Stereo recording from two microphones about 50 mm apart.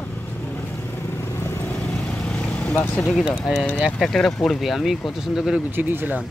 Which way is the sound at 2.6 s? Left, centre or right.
Left.